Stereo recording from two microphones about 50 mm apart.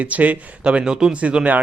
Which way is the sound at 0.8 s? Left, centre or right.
Centre.